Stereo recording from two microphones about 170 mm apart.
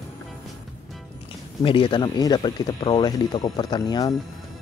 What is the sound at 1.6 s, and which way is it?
Speech, 30° left (ahead or behind).